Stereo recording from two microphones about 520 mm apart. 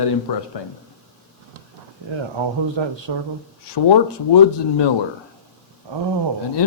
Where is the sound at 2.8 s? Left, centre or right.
Right.